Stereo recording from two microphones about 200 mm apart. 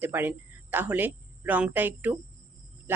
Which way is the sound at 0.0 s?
10° right (ahead or behind).